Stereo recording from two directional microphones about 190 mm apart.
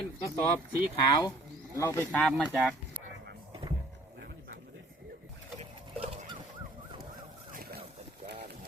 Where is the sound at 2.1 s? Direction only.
5° left (ahead or behind).